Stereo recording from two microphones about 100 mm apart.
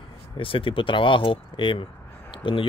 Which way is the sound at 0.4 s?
60° left (ahead or behind).